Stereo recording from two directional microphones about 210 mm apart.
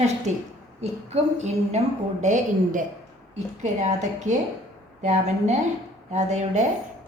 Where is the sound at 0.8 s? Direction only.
30° right (ahead or behind).